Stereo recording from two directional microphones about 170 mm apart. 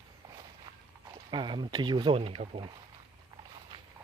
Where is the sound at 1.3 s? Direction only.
25° right (ahead or behind).